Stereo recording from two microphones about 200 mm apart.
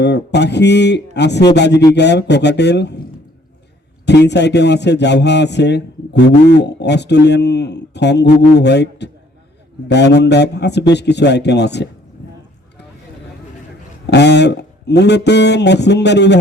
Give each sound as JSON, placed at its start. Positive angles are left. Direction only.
{"t": 0.0, "sound": "a man's voice", "side_deg": 60}
{"t": 4.0, "sound": "a man's voice", "side_deg": 60}
{"t": 14.1, "sound": "a man's voice", "side_deg": 60}